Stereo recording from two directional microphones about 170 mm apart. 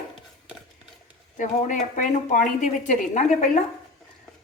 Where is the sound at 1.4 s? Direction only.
50° left (ahead or behind).